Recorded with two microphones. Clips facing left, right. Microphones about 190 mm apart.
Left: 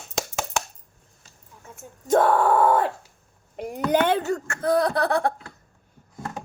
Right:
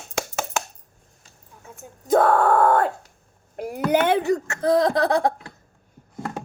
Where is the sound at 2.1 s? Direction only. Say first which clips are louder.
Right 1 dB; centre (ahead or behind).